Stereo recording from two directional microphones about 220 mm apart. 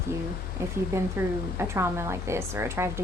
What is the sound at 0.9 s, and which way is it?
A woman's voice, 15° right (ahead or behind).